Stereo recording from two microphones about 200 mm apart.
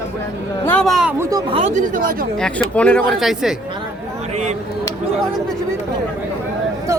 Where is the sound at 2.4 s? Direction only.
5° left (ahead or behind).